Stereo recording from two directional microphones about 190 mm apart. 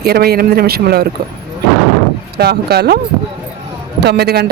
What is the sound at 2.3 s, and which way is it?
Speech, 60° right (ahead or behind).